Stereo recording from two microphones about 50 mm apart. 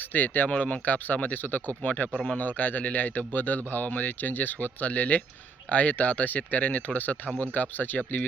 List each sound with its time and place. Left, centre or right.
0.1 s speech: left